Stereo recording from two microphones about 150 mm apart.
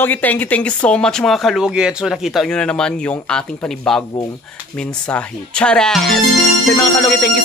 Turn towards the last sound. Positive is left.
turn(degrees=10)  # may be behind; listen again after turning